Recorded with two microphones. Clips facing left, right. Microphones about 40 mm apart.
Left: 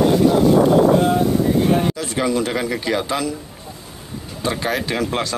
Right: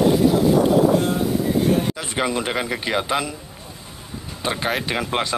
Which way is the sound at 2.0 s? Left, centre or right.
Right.